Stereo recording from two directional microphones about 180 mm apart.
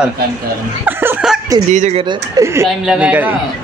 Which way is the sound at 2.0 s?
20° right (ahead or behind).